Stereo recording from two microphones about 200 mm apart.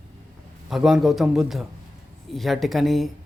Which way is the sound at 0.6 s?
Centre (ahead or behind).